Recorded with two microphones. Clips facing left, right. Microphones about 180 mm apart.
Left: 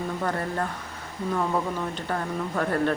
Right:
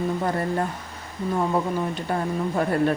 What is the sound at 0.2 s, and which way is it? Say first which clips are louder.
Speech: right 3 dB; 10° right (ahead or behind).